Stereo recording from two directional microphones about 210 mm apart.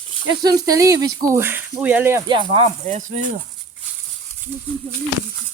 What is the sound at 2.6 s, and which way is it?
Speech, 35° right (ahead or behind).